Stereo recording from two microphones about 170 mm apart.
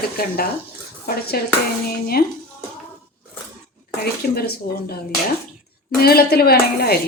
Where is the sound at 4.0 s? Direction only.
65° left (ahead or behind).